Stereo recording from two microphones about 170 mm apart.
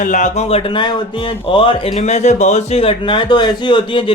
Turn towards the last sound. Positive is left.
turn(degrees=30)  # may be behind; listen again after turning